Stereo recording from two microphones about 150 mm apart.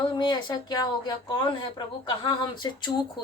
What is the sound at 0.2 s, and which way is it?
A woman's voice, 30° left (ahead or behind).